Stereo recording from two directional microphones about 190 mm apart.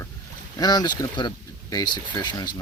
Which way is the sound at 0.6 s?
20° left (ahead or behind).